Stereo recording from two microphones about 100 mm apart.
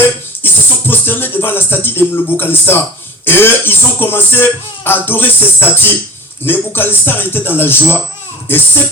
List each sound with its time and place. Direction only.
0.0 s music: 20° left (ahead or behind)
3.2 s speech: 20° left (ahead or behind)